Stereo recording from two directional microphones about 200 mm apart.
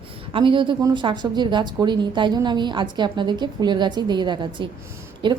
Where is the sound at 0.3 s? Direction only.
25° right (ahead or behind).